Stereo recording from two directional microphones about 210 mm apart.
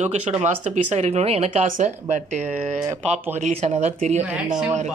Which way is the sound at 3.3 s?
35° right (ahead or behind).